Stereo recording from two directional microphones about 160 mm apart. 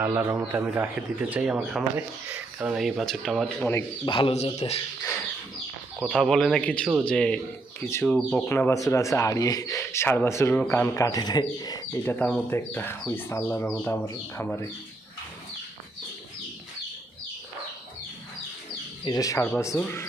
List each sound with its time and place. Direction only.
0.0 s speech: 15° right (ahead or behind); by 3.8 s centre (ahead or behind)
4.0 s speech: 30° left (ahead or behind)
6.0 s speech: 5° left (ahead or behind); by 11.8 s 25° left (ahead or behind)
12.0 s speech: 10° left (ahead or behind)
19.0 s speech: 25° left (ahead or behind)